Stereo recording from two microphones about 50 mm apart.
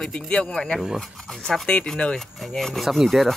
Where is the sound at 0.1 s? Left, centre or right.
Centre.